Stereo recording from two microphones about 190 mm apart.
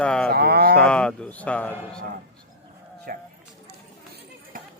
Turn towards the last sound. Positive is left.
turn(degrees=-50)  # may be behind; listen again after turning